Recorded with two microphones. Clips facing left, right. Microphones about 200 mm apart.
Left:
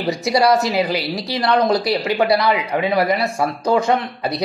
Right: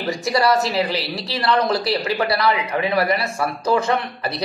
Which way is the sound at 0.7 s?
20° left (ahead or behind).